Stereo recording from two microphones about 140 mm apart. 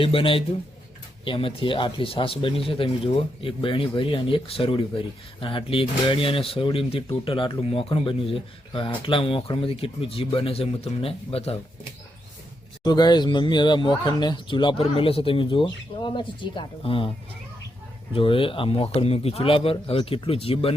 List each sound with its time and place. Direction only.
0.0 s speech: 40° left (ahead or behind)
12.8 s speech: 30° left (ahead or behind)
18.1 s a man's voice: 40° left (ahead or behind)